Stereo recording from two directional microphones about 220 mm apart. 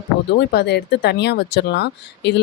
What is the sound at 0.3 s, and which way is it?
Speech, 50° left (ahead or behind).